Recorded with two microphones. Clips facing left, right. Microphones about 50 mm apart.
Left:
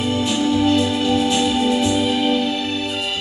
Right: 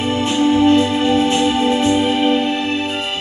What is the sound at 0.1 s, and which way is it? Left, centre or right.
Music, right.